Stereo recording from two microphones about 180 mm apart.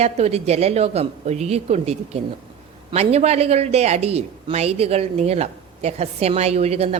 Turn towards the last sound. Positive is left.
turn(degrees=-35)  # may be behind; listen again after turning